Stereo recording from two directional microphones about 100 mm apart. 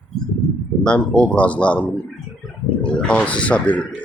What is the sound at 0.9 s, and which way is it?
Speech, 10° left (ahead or behind).